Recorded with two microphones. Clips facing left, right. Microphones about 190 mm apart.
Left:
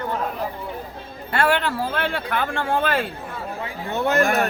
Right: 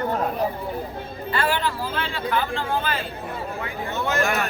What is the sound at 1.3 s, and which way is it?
Speech, 65° left (ahead or behind).